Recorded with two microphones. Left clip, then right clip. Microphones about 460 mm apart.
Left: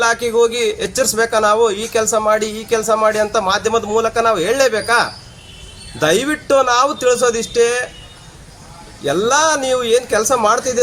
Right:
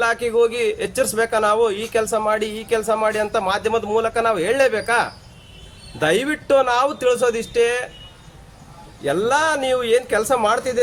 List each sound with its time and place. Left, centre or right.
0.0 s a man's voice: right
9.0 s a man's voice: right